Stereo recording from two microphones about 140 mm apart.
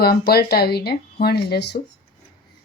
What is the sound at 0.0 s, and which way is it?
Speech, 90° left.